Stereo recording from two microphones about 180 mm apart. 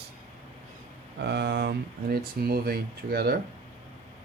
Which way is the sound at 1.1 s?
70° right (ahead or behind).